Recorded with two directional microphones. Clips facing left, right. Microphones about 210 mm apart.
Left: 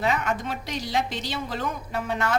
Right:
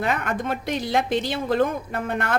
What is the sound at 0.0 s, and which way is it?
A woman's voice, 55° right (ahead or behind).